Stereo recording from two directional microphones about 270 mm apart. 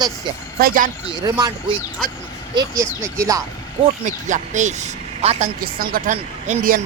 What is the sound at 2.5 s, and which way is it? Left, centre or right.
Speech, centre.